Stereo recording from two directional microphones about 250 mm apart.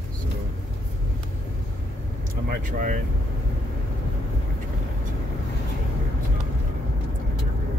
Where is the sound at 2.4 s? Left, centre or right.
Right.